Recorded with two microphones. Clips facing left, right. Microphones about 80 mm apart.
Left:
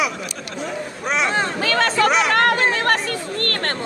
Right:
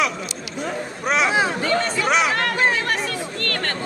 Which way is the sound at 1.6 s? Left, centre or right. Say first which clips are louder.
Left 3 dB; left.